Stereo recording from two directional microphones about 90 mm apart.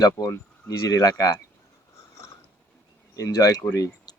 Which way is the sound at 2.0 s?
35° left (ahead or behind).